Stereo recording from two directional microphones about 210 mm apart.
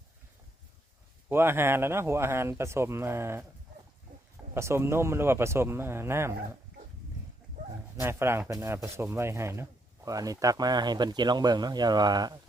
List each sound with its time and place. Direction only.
1.3 s speech: 10° right (ahead or behind)
4.5 s speech: 10° right (ahead or behind)
7.9 s speech: 10° right (ahead or behind)